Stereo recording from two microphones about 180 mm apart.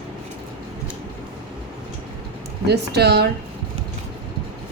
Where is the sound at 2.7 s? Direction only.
65° right (ahead or behind).